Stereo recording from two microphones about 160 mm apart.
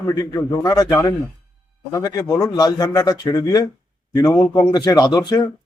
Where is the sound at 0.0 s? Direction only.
25° left (ahead or behind).